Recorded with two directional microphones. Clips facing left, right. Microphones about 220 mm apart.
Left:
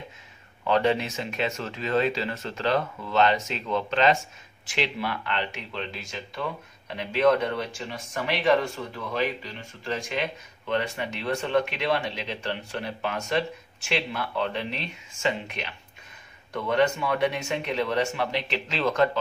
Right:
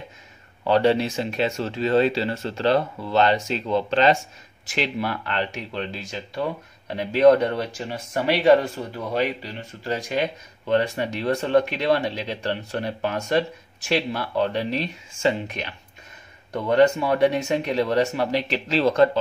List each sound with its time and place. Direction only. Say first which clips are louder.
0.7 s speech: right 4 dB; 35° right (ahead or behind)